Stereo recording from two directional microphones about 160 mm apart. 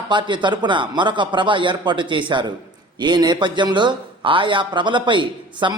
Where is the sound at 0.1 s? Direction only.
30° right (ahead or behind).